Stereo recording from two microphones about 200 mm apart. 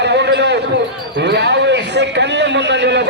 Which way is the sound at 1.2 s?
55° right (ahead or behind).